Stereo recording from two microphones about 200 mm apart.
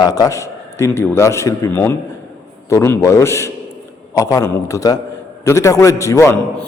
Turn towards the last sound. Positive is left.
turn(degrees=15)  # may be behind; listen again after turning